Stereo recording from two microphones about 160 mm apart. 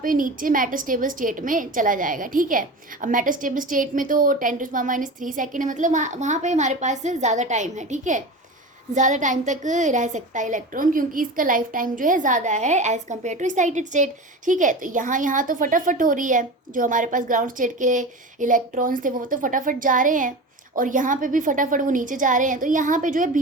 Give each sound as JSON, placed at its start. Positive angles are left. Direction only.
{"t": 0.0, "sound": "a woman's voice", "side_deg": -60}